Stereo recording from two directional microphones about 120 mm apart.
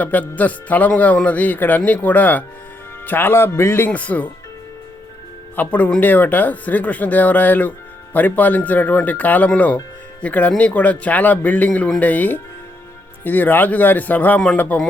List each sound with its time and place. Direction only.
0.0 s speech: 15° left (ahead or behind)
5.5 s speech: 15° left (ahead or behind)